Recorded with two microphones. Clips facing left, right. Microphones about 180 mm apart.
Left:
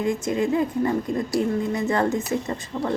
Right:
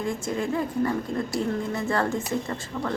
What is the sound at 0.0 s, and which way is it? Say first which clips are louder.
A woman's voice: left 5 dB; 20° left (ahead or behind).